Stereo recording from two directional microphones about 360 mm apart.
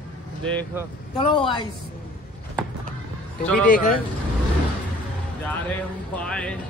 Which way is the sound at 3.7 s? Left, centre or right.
Left.